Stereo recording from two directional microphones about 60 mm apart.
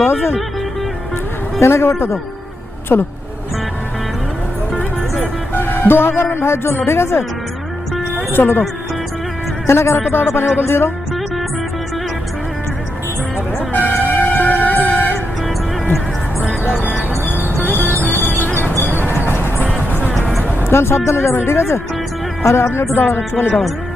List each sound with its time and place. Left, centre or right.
0.0 s speech: left
1.6 s speech: left
5.5 s music: left
6.3 s speech: left
8.3 s speech: left
9.6 s speech: left
13.3 s music: left
17.2 s music: left
20.7 s speech: left